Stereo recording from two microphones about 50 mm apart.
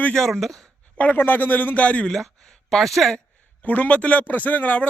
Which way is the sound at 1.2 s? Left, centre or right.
Left.